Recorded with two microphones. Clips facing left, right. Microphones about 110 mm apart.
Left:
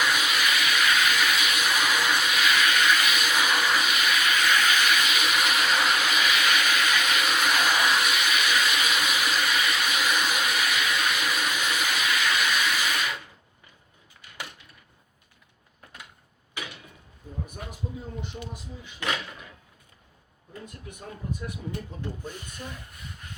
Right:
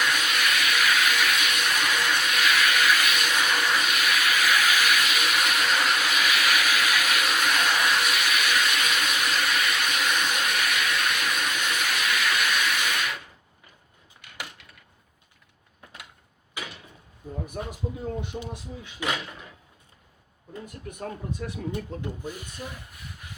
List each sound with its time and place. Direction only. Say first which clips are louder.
0.0 s vehicle: even; centre (ahead or behind)
17.6 s a sound: right 7 dB; 90° right
18.3 s speech: right 4 dB; 45° right (ahead or behind)
19.0 s speech: right 1 dB; 10° right (ahead or behind)
21.7 s speech: right 3 dB; 15° right (ahead or behind)
22.9 s a sound: even; centre (ahead or behind)